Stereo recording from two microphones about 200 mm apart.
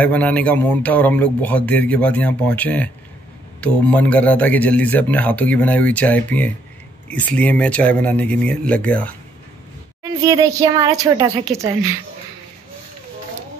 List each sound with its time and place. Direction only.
0.0 s speech: 5° left (ahead or behind)
10.2 s a woman's voice: 15° right (ahead or behind)